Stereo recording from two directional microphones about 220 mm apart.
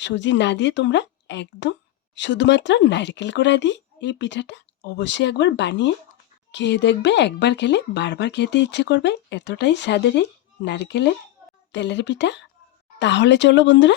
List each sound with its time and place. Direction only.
0.0 s speech: 55° left (ahead or behind)